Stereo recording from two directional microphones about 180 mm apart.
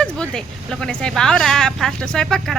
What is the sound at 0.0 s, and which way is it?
A woman's voice, 5° left (ahead or behind).